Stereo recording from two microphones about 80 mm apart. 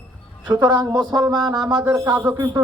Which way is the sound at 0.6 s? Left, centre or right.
Right.